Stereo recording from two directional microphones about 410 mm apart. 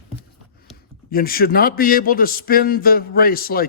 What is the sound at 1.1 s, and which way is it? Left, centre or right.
A man's voice, left.